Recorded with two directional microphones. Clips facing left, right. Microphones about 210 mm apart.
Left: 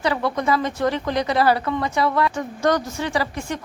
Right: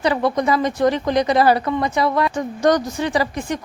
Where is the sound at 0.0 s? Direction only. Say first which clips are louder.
Right 4 dB; 15° right (ahead or behind).